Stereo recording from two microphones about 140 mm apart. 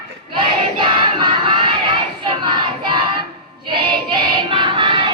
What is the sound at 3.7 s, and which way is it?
Choir, 35° right (ahead or behind).